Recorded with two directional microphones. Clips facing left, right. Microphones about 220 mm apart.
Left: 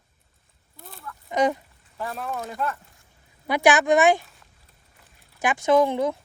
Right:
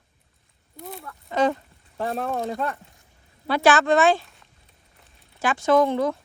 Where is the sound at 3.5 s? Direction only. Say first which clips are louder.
Even; 15° left (ahead or behind).